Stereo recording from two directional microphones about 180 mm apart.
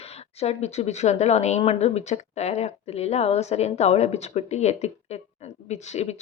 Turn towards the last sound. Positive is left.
turn(degrees=40)  # may be behind; listen again after turning